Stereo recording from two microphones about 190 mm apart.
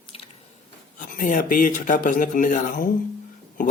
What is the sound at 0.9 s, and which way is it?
Speech, 45° left (ahead or behind).